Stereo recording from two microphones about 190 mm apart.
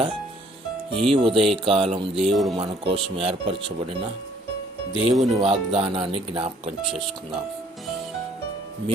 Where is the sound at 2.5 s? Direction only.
30° right (ahead or behind).